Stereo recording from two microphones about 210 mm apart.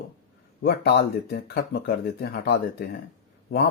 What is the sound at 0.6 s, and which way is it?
Speech, 50° left (ahead or behind).